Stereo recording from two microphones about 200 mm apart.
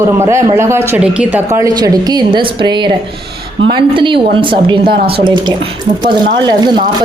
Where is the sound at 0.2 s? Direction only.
15° right (ahead or behind).